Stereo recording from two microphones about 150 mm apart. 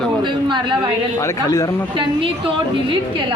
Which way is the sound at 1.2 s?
20° left (ahead or behind).